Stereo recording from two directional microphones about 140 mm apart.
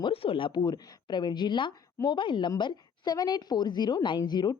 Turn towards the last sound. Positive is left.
turn(degrees=30)  # may be behind; listen again after turning